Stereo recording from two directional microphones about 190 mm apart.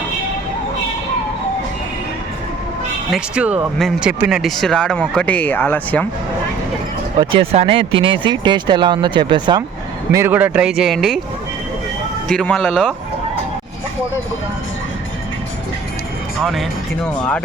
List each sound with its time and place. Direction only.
3.1 s speech: 5° right (ahead or behind)
7.2 s speech: 25° right (ahead or behind)
10.1 s speech: 15° right (ahead or behind)
12.3 s speech: 5° left (ahead or behind)
16.4 s speech: centre (ahead or behind)